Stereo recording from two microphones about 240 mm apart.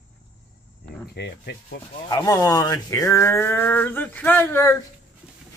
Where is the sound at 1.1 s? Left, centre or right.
Left.